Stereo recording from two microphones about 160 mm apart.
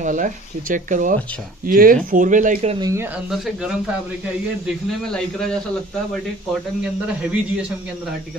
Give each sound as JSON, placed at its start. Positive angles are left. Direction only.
{"t": 0.0, "sound": "speech", "side_deg": -55}
{"t": 2.8, "sound": "a man's voice", "side_deg": -20}
{"t": 3.3, "sound": "speech", "side_deg": -5}
{"t": 5.0, "sound": "speech", "side_deg": 5}
{"t": 6.8, "sound": "a man's voice", "side_deg": -5}